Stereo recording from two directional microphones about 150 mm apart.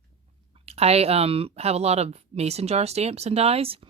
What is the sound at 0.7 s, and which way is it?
Speech, 45° right (ahead or behind).